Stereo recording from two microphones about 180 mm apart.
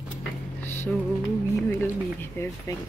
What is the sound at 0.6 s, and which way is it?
Music, 10° left (ahead or behind).